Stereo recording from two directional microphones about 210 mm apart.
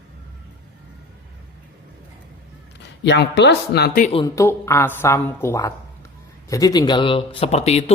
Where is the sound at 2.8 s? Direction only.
55° left (ahead or behind).